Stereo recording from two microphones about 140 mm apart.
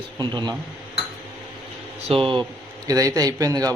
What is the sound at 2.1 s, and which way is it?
Speech, 40° right (ahead or behind).